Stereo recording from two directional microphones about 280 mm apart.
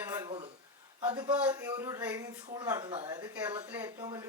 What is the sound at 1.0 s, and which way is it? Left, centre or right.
A woman's voice, centre.